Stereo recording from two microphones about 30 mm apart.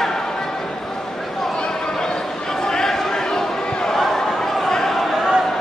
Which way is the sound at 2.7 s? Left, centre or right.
Centre.